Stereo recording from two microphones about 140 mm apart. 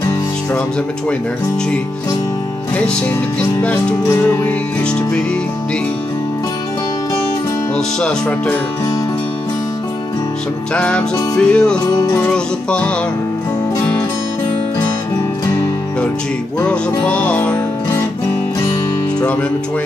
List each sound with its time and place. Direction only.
3.3 s music: 10° left (ahead or behind)
7.7 s music: 5° left (ahead or behind)
10.7 s music: 10° left (ahead or behind)
11.9 s music: 30° left (ahead or behind)
16.6 s music: 10° left (ahead or behind)